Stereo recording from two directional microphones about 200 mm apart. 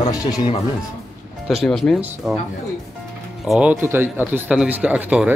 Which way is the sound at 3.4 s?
Centre (ahead or behind).